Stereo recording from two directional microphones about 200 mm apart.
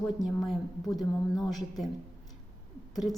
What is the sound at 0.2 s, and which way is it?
A woman's voice, centre (ahead or behind).